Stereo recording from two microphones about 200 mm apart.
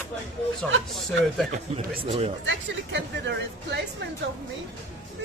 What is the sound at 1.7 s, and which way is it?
Speech, 30° right (ahead or behind).